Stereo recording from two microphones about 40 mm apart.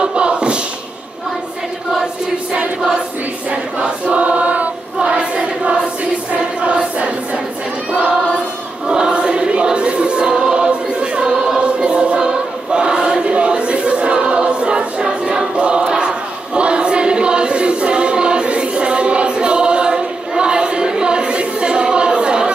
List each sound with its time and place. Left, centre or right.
0.0 s a sound: right
3.8 s choir: right
4.9 s choir: right
8.8 s choir: right